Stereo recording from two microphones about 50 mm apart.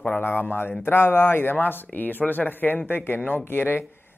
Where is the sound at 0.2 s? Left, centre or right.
Left.